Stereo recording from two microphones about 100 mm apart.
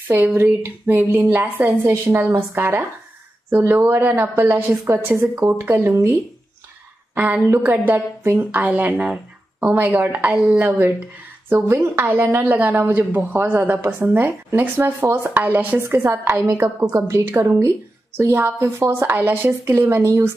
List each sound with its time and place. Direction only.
0.1 s a woman's voice: 20° right (ahead or behind)
7.2 s a woman's voice: 15° right (ahead or behind)